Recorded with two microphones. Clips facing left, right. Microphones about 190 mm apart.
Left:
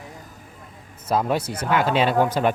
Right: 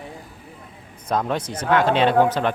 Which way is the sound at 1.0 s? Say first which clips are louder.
Left 1 dB; 5° left (ahead or behind).